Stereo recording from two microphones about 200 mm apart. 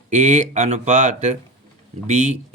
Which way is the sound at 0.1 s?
35° right (ahead or behind).